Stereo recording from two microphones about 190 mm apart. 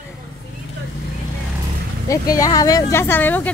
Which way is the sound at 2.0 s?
15° left (ahead or behind).